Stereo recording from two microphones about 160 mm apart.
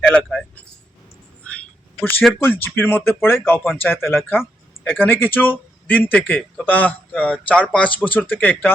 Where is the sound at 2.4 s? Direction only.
15° left (ahead or behind).